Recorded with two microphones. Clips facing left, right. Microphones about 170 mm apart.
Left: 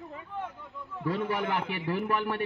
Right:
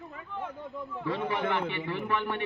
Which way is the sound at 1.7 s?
40° left (ahead or behind).